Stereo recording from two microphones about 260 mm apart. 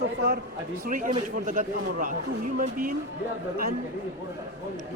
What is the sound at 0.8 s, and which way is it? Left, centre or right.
A man's voice, right.